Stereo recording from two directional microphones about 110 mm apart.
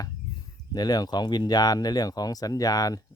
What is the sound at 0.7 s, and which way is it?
Speech, 35° left (ahead or behind).